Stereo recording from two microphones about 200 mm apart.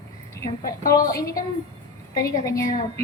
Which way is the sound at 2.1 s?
15° left (ahead or behind).